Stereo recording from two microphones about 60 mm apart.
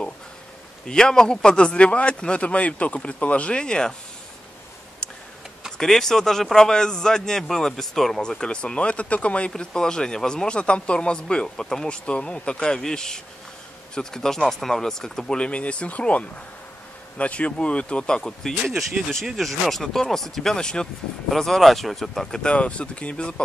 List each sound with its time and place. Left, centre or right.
0.8 s a man's voice: centre
5.0 s tick-tock: centre
5.8 s a man's voice: centre
9.5 s a man's voice: centre
19.2 s a man's voice: centre